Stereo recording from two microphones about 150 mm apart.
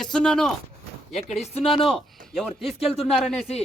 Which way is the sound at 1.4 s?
45° left (ahead or behind).